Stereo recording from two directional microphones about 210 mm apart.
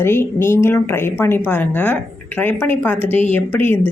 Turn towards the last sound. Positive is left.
turn(degrees=10)  # may be behind; listen again after turning